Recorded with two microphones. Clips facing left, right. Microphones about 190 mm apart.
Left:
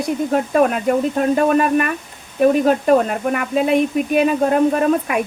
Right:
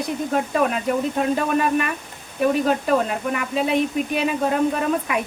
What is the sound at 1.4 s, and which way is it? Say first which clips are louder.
A woman's voice: left 5 dB; 50° left (ahead or behind).